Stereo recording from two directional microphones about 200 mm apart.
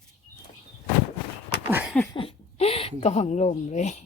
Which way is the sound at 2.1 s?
25° left (ahead or behind).